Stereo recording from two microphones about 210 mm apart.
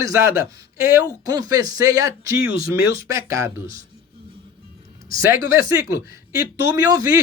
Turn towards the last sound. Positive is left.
turn(degrees=-15)  # may be behind; listen again after turning